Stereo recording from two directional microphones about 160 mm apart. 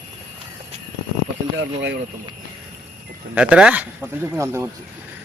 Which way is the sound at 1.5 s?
90° right.